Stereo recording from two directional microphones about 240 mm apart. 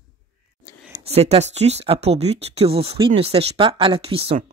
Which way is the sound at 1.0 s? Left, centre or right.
Right.